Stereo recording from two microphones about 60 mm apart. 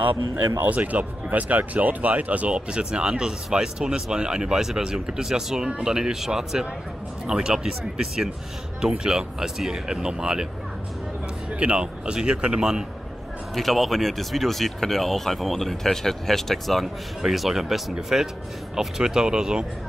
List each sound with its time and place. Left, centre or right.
0.6 s speech: right
11.6 s speech: centre
13.6 s speech: centre